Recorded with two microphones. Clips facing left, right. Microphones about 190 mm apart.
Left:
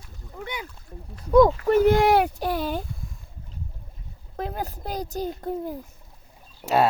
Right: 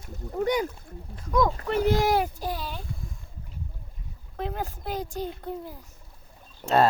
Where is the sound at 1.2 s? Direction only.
35° left (ahead or behind).